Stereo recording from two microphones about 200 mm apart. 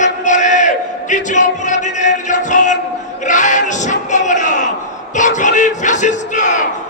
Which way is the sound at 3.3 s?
40° left (ahead or behind).